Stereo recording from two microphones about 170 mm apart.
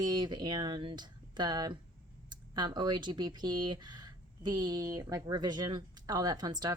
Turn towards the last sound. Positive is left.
turn(degrees=-25)  # may be behind; listen again after turning